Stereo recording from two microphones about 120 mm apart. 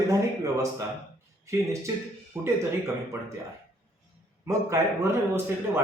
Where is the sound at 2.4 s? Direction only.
20° right (ahead or behind).